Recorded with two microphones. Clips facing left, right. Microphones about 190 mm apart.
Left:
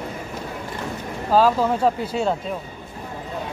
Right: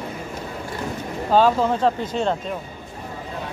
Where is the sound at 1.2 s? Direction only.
Centre (ahead or behind).